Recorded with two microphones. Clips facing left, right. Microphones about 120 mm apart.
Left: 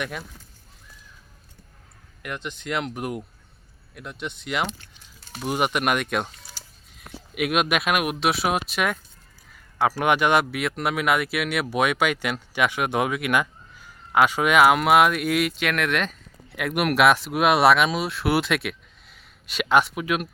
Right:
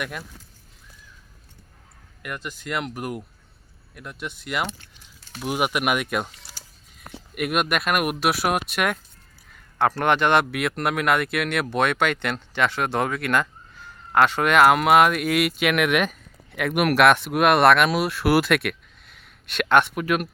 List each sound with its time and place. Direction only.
2.2 s speech: 5° right (ahead or behind)
7.3 s speech: centre (ahead or behind)